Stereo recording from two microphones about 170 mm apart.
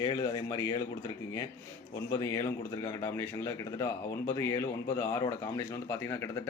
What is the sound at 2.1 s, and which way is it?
A man's voice, 15° left (ahead or behind).